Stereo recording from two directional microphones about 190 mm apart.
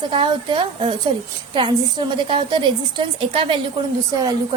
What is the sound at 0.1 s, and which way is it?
A woman's voice, 25° right (ahead or behind).